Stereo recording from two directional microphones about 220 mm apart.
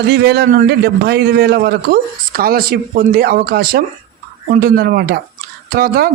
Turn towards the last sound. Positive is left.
turn(degrees=-45)  # may be behind; listen again after turning